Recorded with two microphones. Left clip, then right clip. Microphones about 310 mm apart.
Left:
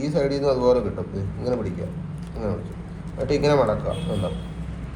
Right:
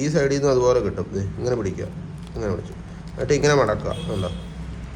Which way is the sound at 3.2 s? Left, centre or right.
Right.